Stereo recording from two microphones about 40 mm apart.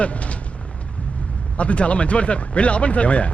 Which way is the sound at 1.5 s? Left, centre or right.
Left.